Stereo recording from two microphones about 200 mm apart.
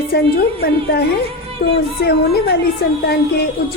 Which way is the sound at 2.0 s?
55° left (ahead or behind).